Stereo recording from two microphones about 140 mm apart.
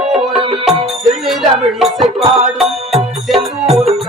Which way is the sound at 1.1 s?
Centre (ahead or behind).